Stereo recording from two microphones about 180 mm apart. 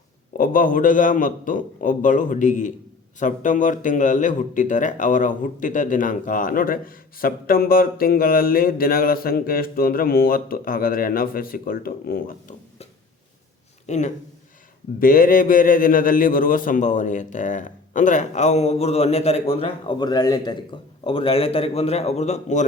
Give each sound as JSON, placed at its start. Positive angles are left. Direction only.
{"t": 0.3, "sound": "a man's voice", "side_deg": 50}
{"t": 13.8, "sound": "a man's voice", "side_deg": 40}